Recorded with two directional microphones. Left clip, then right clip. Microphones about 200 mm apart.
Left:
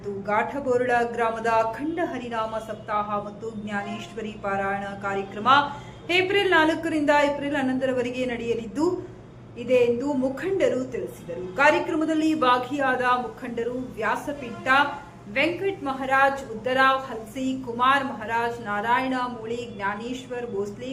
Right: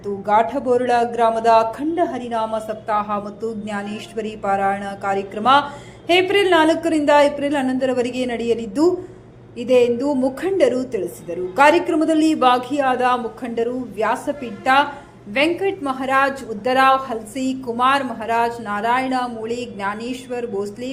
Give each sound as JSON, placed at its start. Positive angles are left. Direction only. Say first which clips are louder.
{"t": 0.3, "sound": "a woman's voice", "louder": "right 7 dB", "side_deg": -25}